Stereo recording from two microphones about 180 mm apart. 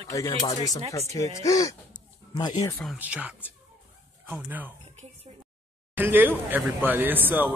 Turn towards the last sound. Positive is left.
turn(degrees=-10)  # may be behind; listen again after turning